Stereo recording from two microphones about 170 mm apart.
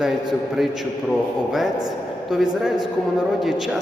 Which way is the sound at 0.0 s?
Centre (ahead or behind).